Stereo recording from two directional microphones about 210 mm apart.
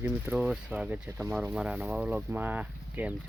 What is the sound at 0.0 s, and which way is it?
Speech, 5° right (ahead or behind).